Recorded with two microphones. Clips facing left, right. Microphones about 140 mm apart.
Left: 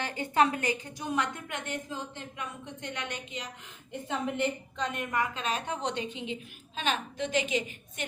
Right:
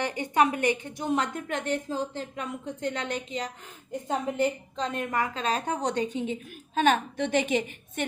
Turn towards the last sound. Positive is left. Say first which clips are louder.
# right 4 dB
turn(degrees=-55)  # may be behind; listen again after turning